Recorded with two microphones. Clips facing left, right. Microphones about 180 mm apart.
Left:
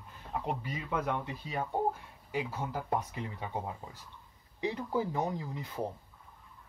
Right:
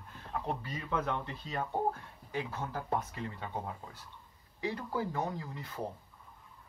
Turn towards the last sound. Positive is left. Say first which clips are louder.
# left 3 dB
turn(degrees=15)  # may be behind; listen again after turning